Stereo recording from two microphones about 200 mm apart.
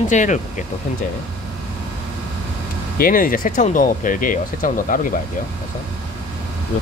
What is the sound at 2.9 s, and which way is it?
Speech, 45° left (ahead or behind).